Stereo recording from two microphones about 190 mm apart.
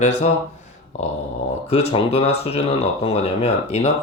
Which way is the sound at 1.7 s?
30° left (ahead or behind).